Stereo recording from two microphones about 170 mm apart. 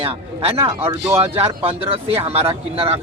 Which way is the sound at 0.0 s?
35° right (ahead or behind).